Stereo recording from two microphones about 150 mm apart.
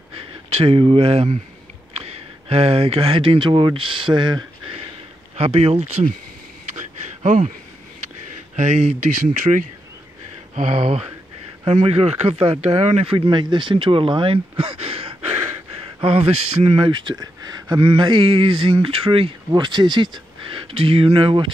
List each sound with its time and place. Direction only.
0.5 s speech: 40° right (ahead or behind)
5.3 s speech: 45° right (ahead or behind)
7.2 s speech: 50° right (ahead or behind)
8.5 s speech: 50° right (ahead or behind)
10.5 s speech: 45° right (ahead or behind)